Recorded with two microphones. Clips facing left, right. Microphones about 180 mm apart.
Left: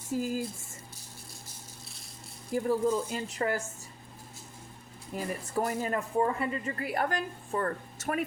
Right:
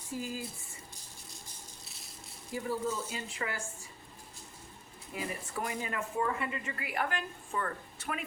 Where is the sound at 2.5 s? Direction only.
50° left (ahead or behind).